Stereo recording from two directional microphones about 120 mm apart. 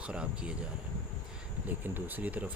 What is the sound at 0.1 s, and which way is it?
Speech, 10° right (ahead or behind).